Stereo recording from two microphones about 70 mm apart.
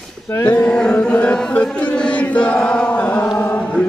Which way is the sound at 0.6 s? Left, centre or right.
Centre.